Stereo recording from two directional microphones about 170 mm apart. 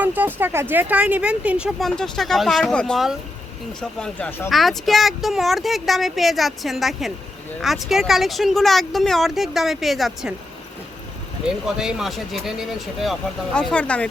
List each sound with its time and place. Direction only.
0.0 s speech: 10° right (ahead or behind); by 4.4 s 10° left (ahead or behind)
4.4 s speech: centre (ahead or behind)
11.4 s speech: 5° right (ahead or behind)